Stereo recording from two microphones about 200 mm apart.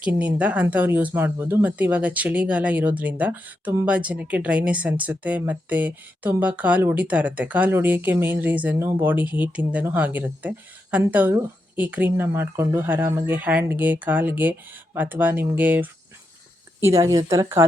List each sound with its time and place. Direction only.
0.0 s speech: 5° right (ahead or behind)